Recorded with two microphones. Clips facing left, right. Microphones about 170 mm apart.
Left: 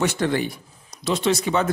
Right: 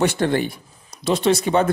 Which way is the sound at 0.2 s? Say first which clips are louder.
Right 2 dB; 55° right (ahead or behind).